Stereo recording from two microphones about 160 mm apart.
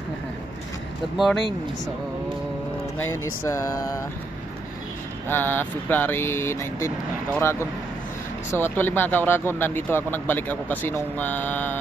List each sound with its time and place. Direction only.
1.1 s speech: centre (ahead or behind)
3.0 s speech: 20° left (ahead or behind)
5.3 s speech: 10° left (ahead or behind)
8.5 s speech: 15° left (ahead or behind)